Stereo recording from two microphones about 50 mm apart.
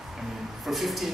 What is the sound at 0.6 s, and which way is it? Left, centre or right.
Speech, centre.